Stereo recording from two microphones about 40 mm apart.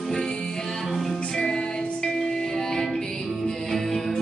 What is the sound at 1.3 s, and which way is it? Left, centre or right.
Music, centre.